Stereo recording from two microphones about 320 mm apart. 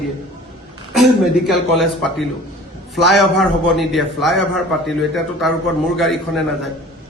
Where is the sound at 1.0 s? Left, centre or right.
Centre.